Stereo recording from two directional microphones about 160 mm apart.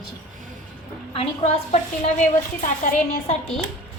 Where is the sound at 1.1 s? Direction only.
40° left (ahead or behind).